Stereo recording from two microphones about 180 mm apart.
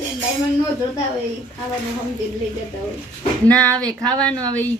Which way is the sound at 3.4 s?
5° left (ahead or behind).